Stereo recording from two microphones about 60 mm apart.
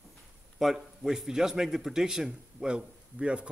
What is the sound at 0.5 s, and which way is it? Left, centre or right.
Speech, centre.